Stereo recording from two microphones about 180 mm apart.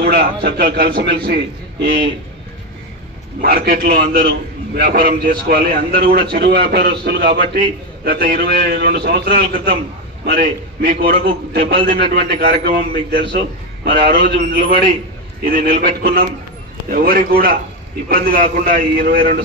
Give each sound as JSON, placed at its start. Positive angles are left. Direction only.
{"t": 0.0, "sound": "a man's voice", "side_deg": -65}
{"t": 3.3, "sound": "a man's voice", "side_deg": -55}